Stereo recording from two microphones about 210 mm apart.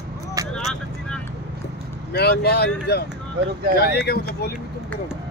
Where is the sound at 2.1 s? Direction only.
50° left (ahead or behind).